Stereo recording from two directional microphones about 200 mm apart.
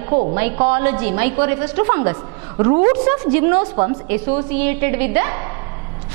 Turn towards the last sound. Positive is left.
turn(degrees=-15)  # may be behind; listen again after turning